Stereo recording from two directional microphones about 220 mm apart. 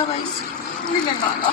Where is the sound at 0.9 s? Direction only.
20° left (ahead or behind).